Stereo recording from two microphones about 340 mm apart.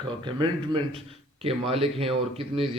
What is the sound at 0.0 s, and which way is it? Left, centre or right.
A man's voice, centre.